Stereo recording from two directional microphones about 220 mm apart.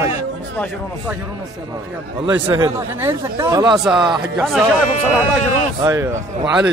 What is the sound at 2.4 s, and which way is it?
Speech, 20° right (ahead or behind).